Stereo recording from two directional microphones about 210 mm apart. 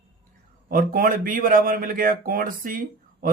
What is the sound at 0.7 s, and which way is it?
A man's voice, 40° right (ahead or behind).